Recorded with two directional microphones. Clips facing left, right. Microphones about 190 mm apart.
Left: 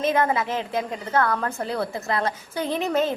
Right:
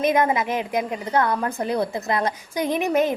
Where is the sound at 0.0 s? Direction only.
15° right (ahead or behind).